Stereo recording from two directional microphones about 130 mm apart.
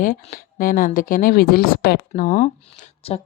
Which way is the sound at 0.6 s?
90° left.